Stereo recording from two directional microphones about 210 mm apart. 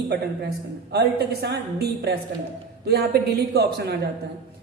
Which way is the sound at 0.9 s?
50° right (ahead or behind).